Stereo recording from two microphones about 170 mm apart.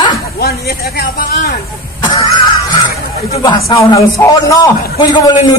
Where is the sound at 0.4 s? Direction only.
65° left (ahead or behind).